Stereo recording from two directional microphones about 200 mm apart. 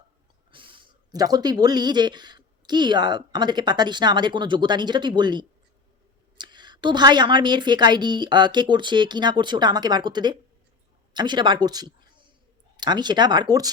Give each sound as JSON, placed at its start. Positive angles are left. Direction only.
{"t": 0.5, "sound": "a woman's voice", "side_deg": -25}